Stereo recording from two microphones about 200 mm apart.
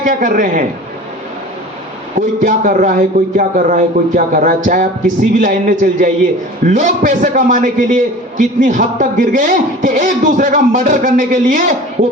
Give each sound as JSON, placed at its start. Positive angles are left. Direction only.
{"t": 0.0, "sound": "a man's voice", "side_deg": -40}
{"t": 2.1, "sound": "a man's voice", "side_deg": -40}